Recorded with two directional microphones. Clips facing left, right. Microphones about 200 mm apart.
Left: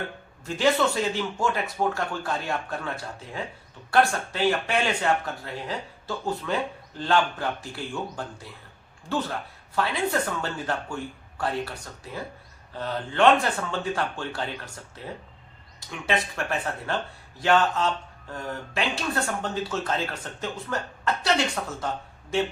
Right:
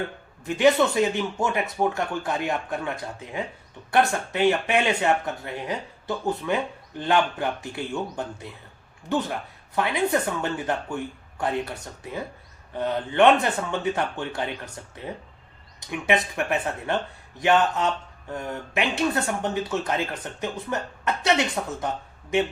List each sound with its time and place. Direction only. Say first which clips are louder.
0.4 s speech: right 3 dB; 20° right (ahead or behind)
15.9 s speech: right 4 dB; 20° right (ahead or behind)